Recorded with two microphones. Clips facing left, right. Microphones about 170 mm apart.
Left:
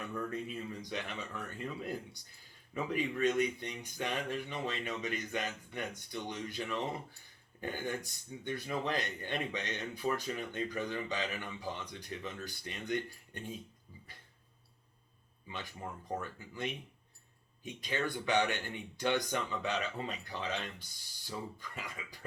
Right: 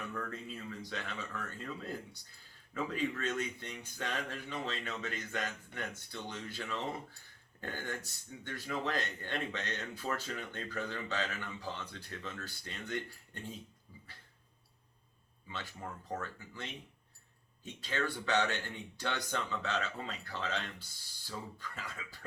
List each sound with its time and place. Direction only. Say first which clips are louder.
0.1 s speech: left 3 dB; 15° left (ahead or behind)
15.5 s speech: left 1 dB; 15° left (ahead or behind)